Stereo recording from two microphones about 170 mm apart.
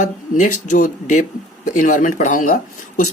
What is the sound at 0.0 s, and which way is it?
Speech, 45° left (ahead or behind).